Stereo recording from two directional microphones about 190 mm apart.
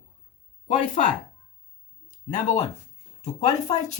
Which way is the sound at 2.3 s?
35° left (ahead or behind).